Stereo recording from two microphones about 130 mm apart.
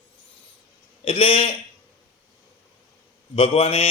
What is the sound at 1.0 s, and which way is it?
Speech, 45° left (ahead or behind).